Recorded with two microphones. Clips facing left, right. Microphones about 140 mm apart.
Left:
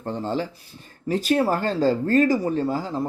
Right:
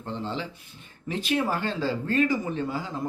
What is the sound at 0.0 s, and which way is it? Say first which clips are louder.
Speech: left 6 dB; 45° left (ahead or behind).